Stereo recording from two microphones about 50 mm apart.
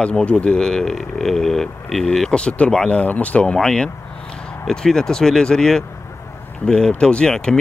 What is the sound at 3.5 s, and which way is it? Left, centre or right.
Speech, centre.